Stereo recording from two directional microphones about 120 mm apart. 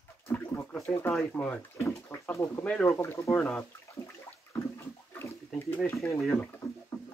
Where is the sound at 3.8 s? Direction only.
25° left (ahead or behind).